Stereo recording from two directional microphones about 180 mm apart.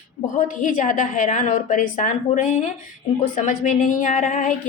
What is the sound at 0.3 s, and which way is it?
A woman's voice, 50° left (ahead or behind).